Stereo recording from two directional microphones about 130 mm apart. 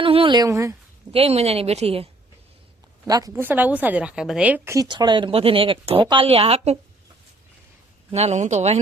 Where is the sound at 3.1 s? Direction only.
30° right (ahead or behind).